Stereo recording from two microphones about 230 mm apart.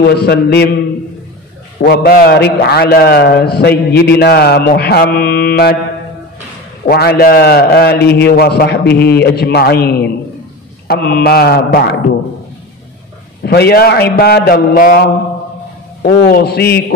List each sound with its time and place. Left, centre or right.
0.0 s a man's voice: left
1.8 s a man's voice: left
6.9 s a man's voice: left
13.4 s a man's voice: left